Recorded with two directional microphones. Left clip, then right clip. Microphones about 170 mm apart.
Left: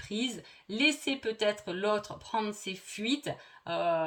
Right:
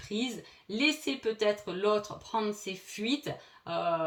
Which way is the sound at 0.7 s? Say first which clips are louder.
Left 1 dB; 45° left (ahead or behind).